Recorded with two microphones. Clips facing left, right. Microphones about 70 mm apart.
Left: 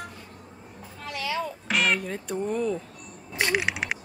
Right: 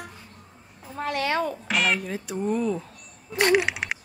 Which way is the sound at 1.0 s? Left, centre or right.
Right.